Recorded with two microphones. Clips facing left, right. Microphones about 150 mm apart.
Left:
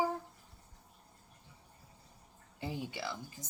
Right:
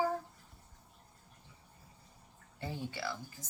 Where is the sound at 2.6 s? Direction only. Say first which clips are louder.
Even; 15° left (ahead or behind).